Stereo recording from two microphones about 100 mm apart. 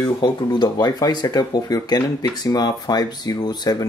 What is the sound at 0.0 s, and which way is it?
Speech, 45° left (ahead or behind).